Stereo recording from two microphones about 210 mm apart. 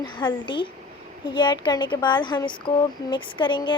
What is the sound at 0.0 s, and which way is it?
A woman's voice, 20° left (ahead or behind).